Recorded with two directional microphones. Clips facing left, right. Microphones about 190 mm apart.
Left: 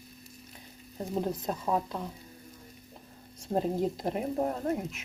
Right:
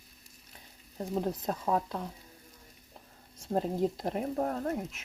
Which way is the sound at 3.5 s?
5° left (ahead or behind).